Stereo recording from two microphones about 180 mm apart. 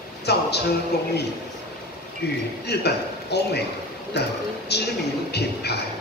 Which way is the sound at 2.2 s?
65° left (ahead or behind).